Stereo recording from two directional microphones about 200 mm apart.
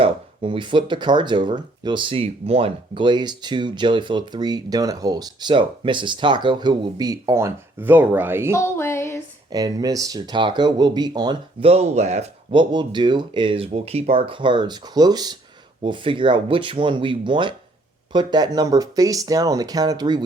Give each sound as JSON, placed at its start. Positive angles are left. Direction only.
{"t": 0.0, "sound": "speech", "side_deg": -25}
{"t": 8.5, "sound": "music", "side_deg": 10}
{"t": 9.5, "sound": "speech", "side_deg": -20}